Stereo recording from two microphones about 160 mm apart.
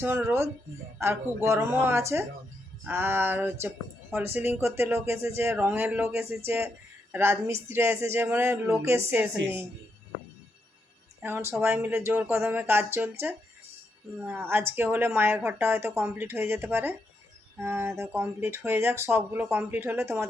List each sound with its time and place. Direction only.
0.0 s speech: 15° right (ahead or behind)
11.2 s speech: 15° right (ahead or behind)